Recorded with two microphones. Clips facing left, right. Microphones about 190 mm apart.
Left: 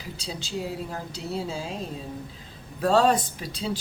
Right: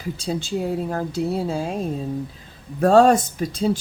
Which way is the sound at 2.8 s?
50° right (ahead or behind).